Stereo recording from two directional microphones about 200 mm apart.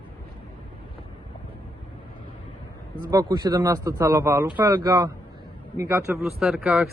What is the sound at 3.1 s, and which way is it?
Speech, 20° right (ahead or behind).